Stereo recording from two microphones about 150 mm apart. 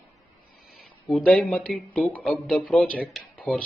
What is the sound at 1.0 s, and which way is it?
Speech, 10° left (ahead or behind).